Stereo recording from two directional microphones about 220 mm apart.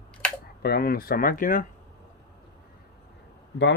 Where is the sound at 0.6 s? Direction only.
45° left (ahead or behind).